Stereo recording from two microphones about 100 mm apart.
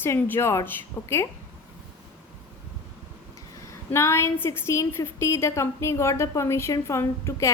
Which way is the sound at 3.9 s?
25° left (ahead or behind).